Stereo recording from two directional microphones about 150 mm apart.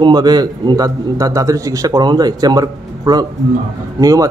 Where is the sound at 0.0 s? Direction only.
30° right (ahead or behind).